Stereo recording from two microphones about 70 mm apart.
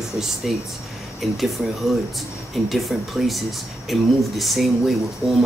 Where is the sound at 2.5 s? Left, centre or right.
Centre.